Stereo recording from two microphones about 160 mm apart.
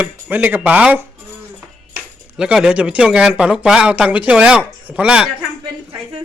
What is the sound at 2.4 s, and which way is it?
Speech, 5° right (ahead or behind).